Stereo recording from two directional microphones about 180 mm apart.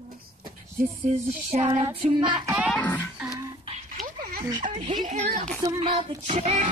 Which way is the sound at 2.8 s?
10° left (ahead or behind).